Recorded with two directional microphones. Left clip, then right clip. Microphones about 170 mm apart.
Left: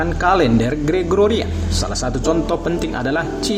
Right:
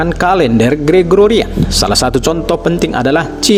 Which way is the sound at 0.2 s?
45° right (ahead or behind).